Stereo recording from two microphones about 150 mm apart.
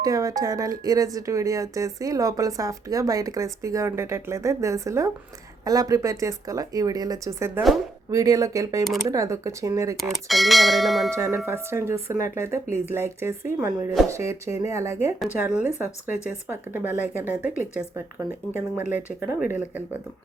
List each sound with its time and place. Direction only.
0.0 s speech: 25° right (ahead or behind)
10.0 s speech: centre (ahead or behind)
11.1 s speech: 15° right (ahead or behind)